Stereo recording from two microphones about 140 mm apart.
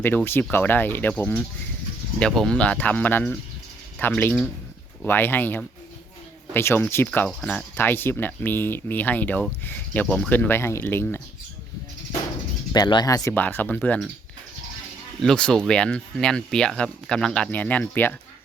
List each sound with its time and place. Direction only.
0.5 s speech: 15° left (ahead or behind)
12.7 s speech: 30° left (ahead or behind)
13.3 s speech: 15° left (ahead or behind)
15.2 s speech: 5° left (ahead or behind)